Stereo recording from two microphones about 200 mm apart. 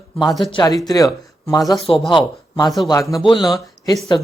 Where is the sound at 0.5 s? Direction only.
20° left (ahead or behind).